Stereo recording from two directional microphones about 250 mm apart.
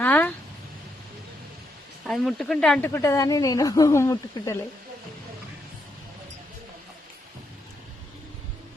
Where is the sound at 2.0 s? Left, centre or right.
Centre.